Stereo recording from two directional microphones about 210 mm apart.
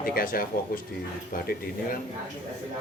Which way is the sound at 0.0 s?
45° left (ahead or behind).